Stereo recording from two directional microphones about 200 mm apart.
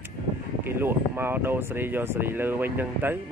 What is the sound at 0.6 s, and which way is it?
Speech, 10° right (ahead or behind).